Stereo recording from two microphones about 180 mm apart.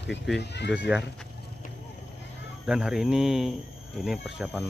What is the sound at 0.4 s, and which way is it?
Speech, 70° left (ahead or behind).